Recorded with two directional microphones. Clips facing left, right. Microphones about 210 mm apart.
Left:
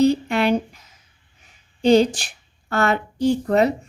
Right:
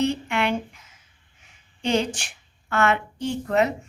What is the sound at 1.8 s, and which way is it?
A woman's voice, 35° left (ahead or behind).